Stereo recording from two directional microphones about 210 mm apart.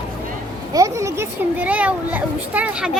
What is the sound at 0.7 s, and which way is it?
Speech, 15° right (ahead or behind).